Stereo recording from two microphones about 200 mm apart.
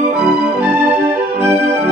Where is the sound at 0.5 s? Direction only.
10° right (ahead or behind).